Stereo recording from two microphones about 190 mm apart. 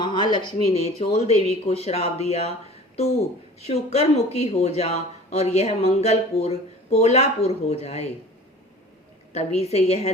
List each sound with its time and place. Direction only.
0.0 s speech: 25° left (ahead or behind)
3.6 s speech: 35° left (ahead or behind)
9.3 s speech: 35° left (ahead or behind)